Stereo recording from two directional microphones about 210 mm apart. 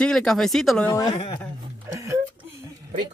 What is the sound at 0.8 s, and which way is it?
Speech, 20° left (ahead or behind).